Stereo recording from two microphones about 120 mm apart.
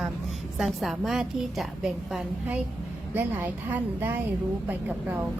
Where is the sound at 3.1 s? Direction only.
15° right (ahead or behind).